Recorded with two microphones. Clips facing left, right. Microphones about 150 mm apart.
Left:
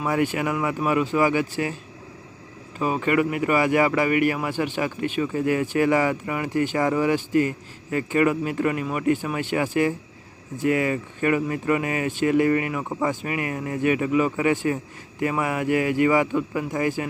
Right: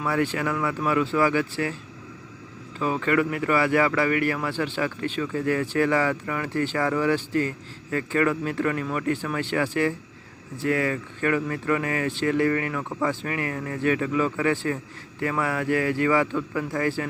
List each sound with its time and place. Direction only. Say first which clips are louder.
0.0 s speech: left 2 dB; 15° left (ahead or behind)
2.7 s speech: left 1 dB; 15° left (ahead or behind)